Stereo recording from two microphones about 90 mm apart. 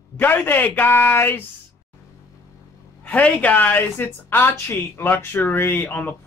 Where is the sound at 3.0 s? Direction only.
15° left (ahead or behind).